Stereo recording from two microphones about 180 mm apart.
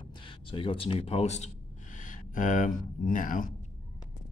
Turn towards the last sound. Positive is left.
turn(degrees=50)  # may be behind; listen again after turning